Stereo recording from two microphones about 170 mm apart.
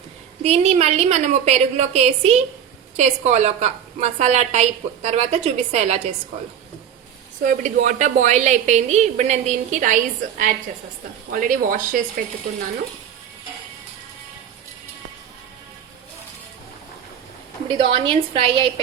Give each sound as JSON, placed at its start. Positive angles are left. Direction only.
{"t": 0.4, "sound": "a woman's voice", "side_deg": -40}
{"t": 7.4, "sound": "a woman's voice", "side_deg": -50}
{"t": 17.7, "sound": "a woman's voice", "side_deg": -30}